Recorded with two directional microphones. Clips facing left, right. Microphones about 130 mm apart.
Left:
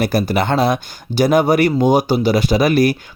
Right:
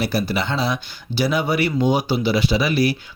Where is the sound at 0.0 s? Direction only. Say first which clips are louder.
Left 5 dB; 45° left (ahead or behind).